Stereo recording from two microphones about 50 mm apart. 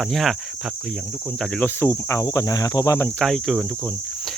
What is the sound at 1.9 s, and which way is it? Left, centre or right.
Cricket, left.